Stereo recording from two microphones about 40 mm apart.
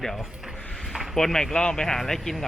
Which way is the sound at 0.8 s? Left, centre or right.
Centre.